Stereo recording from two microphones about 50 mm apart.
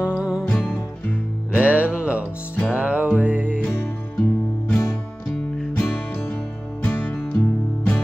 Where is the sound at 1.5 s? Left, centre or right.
Right.